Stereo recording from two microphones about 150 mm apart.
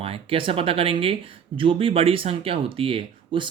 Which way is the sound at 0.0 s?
40° right (ahead or behind).